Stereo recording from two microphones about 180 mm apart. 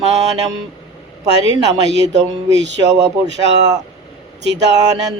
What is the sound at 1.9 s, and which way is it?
Speech, 75° right (ahead or behind).